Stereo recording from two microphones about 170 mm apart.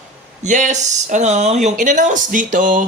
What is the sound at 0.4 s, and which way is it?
Speech, 45° right (ahead or behind).